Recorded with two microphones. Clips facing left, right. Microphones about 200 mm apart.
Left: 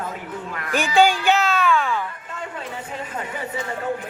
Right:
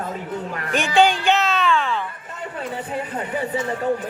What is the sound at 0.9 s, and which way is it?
Music, centre (ahead or behind).